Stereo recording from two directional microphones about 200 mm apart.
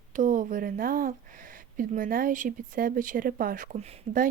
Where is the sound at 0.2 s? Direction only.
40° right (ahead or behind).